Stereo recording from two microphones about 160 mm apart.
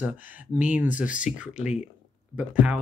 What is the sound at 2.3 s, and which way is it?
Speech, 10° right (ahead or behind).